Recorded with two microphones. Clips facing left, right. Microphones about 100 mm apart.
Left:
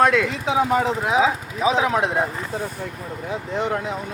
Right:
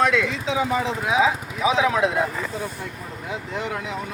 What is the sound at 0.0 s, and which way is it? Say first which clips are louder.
Speech: left 3 dB; 50° left (ahead or behind).